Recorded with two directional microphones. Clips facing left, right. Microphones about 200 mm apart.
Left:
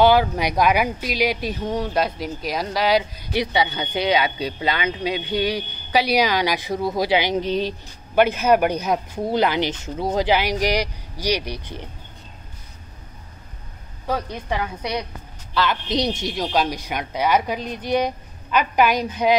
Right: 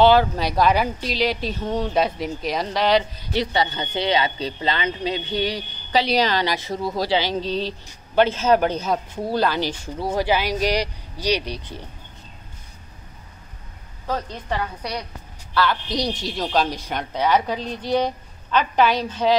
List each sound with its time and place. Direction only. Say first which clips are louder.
0.0 s speech: even; 10° left (ahead or behind)
14.0 s speech: left 2 dB; 10° left (ahead or behind)